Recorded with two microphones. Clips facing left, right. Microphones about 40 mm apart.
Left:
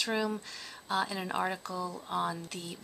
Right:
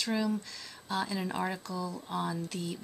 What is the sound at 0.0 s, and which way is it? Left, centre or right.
Speech, left.